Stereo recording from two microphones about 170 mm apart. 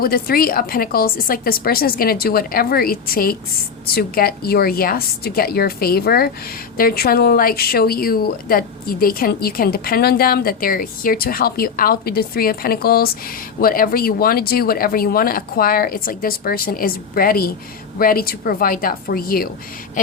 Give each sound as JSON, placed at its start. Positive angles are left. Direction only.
{"t": 0.0, "sound": "a woman's voice", "side_deg": 60}